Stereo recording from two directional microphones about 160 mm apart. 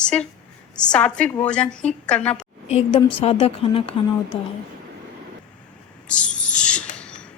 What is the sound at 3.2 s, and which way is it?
Speech, 40° left (ahead or behind).